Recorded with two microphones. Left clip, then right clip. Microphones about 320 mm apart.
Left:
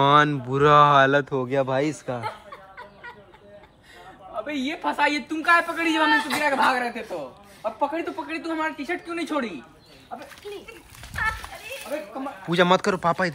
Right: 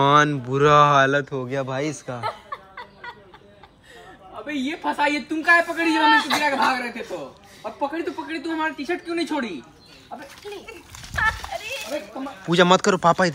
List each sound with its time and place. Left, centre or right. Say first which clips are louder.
0.0 s speech: right 1 dB; centre
2.2 s chuckle: right 4 dB; centre
4.5 s speech: right 2 dB; centre
6.1 s speech: right 4 dB; centre
6.4 s speech: even; centre
11.1 s a sound: right 4 dB; centre
12.4 s speech: right 3 dB; centre